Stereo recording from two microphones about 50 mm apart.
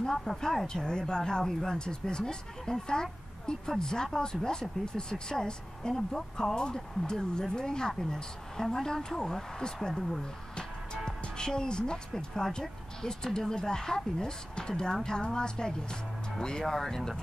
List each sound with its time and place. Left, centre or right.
0.0 s speech: centre